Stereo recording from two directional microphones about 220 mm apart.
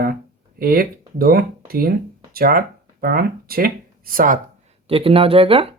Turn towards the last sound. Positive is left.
turn(degrees=-25)  # may be behind; listen again after turning